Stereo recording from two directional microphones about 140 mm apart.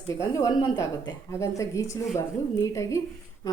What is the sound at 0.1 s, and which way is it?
A woman's voice, 25° left (ahead or behind).